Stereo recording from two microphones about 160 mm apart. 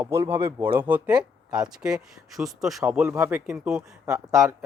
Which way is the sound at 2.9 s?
10° right (ahead or behind).